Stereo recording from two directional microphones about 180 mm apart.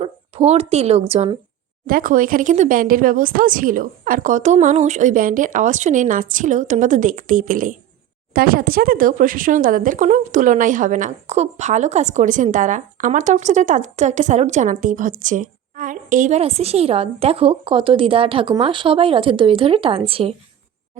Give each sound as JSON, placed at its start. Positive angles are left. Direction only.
{"t": 0.0, "sound": "speech", "side_deg": -35}
{"t": 1.9, "sound": "speech", "side_deg": -50}